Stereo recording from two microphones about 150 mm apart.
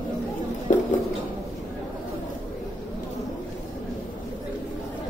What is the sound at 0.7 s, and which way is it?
Music, 55° left (ahead or behind).